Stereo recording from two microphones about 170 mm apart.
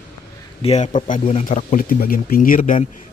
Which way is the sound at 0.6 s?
40° left (ahead or behind).